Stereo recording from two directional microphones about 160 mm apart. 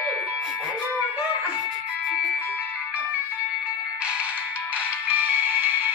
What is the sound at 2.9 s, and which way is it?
Music, 10° right (ahead or behind).